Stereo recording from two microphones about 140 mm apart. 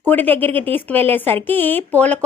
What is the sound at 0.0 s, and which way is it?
A woman's voice, 15° left (ahead or behind).